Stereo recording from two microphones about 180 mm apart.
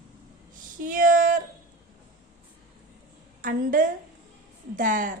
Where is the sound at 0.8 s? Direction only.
50° right (ahead or behind).